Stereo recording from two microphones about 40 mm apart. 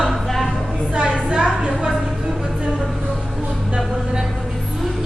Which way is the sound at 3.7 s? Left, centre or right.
Centre.